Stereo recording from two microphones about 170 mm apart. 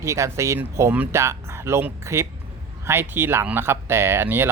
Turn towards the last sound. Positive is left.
turn(degrees=-15)  # may be behind; listen again after turning